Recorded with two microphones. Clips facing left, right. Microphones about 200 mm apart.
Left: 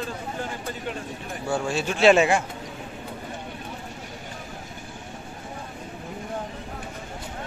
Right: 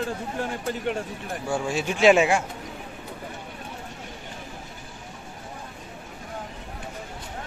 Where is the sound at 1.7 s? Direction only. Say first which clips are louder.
Even; 15° right (ahead or behind).